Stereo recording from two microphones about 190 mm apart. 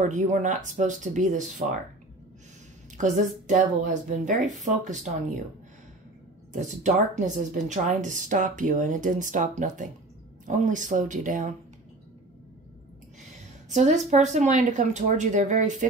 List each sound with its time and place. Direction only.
0.0 s speech: 40° right (ahead or behind)
3.0 s speech: 40° right (ahead or behind)
6.5 s speech: 40° right (ahead or behind)
13.7 s speech: 40° right (ahead or behind)